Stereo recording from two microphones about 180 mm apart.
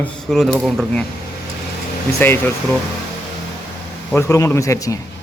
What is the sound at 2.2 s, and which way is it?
Speech, 10° left (ahead or behind).